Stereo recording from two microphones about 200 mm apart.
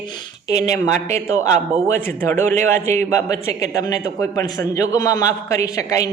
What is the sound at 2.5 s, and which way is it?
Speech, 35° right (ahead or behind).